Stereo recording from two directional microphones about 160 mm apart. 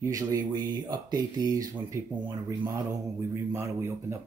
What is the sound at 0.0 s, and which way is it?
Speech, 20° right (ahead or behind).